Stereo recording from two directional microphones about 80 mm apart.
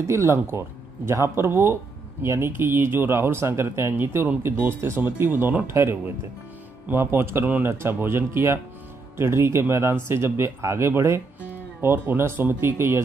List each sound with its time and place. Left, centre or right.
0.0 s speech: right